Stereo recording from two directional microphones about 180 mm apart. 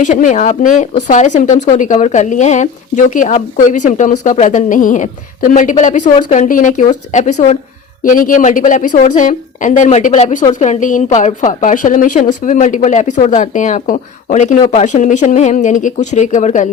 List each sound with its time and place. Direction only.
0.0 s a woman's voice: 45° left (ahead or behind)